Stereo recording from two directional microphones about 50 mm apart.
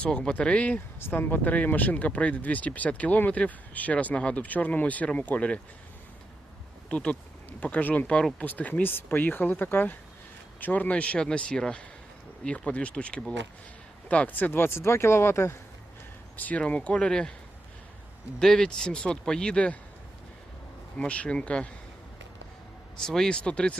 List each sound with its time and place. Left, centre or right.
0.0 s speech: left
0.9 s speech: left
6.9 s speech: left
7.6 s speech: left
10.6 s speech: left
14.5 s speech: left
16.4 s speech: left
18.3 s speech: centre
21.0 s speech: left
23.0 s speech: centre
23.4 s speech: left